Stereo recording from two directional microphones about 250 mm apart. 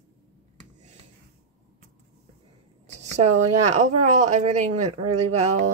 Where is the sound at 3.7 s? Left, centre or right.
Right.